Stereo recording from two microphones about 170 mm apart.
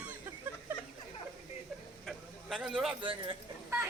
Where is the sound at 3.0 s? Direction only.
30° right (ahead or behind).